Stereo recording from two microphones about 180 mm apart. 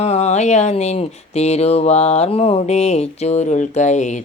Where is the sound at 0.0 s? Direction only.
40° left (ahead or behind).